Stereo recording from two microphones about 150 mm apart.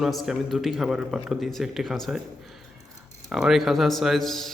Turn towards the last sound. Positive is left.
turn(degrees=0)  # may be behind; listen again after turning